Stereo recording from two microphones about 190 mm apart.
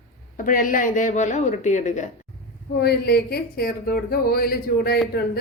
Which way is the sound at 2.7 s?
55° left (ahead or behind).